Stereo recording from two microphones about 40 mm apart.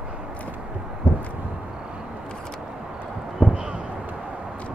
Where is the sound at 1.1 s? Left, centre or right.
Right.